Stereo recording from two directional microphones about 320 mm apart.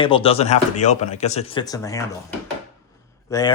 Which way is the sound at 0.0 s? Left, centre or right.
Centre.